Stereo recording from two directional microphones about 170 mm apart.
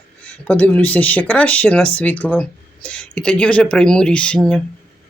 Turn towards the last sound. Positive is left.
turn(degrees=5)  # may be behind; listen again after turning